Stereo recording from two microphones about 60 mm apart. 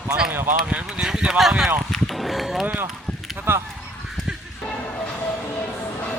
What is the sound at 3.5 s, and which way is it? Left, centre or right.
Speech, right.